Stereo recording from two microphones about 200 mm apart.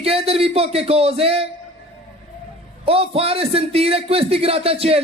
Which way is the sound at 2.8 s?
30° right (ahead or behind).